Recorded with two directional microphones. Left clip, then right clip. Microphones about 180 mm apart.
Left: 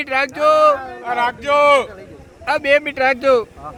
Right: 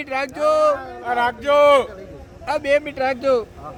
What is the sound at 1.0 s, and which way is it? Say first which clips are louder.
Speech: left 1 dB; 50° right (ahead or behind).